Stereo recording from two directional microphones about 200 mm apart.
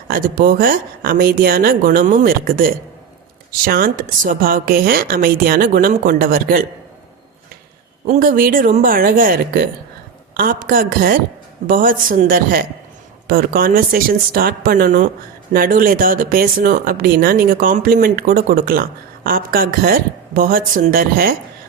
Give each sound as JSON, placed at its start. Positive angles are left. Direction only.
{"t": 0.1, "sound": "speech", "side_deg": -45}
{"t": 8.0, "sound": "speech", "side_deg": -40}